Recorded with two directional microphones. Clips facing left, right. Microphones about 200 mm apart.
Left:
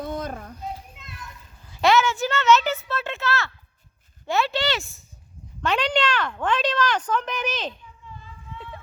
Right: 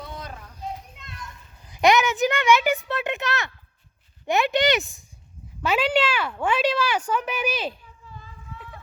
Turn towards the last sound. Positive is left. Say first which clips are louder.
# right 2 dB
turn(degrees=-10)  # may be behind; listen again after turning